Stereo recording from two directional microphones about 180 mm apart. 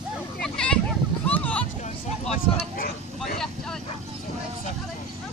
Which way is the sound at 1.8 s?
40° left (ahead or behind).